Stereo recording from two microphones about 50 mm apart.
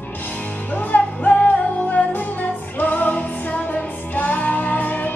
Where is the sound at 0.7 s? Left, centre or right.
Left.